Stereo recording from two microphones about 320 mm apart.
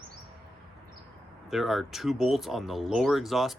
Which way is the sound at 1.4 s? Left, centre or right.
Centre.